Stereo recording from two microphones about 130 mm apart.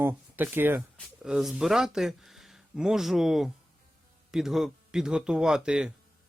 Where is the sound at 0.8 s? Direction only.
5° right (ahead or behind).